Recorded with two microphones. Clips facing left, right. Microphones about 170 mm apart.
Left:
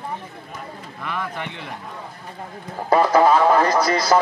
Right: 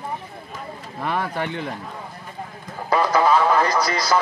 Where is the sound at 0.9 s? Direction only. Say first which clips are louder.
Right 4 dB; 35° right (ahead or behind).